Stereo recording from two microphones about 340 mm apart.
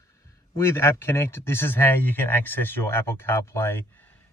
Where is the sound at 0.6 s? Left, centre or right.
Centre.